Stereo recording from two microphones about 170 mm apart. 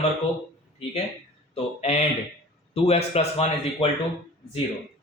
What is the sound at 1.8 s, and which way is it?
Speech, 40° left (ahead or behind).